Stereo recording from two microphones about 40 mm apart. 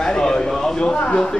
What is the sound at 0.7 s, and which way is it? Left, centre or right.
Speech, left.